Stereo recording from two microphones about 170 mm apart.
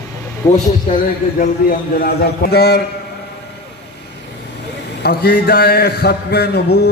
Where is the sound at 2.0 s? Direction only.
65° left (ahead or behind).